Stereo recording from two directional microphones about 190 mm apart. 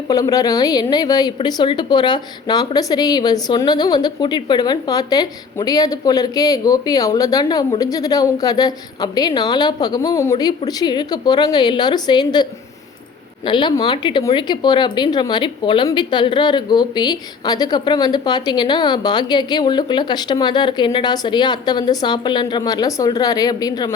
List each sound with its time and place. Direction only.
0.1 s a woman's voice: 20° left (ahead or behind)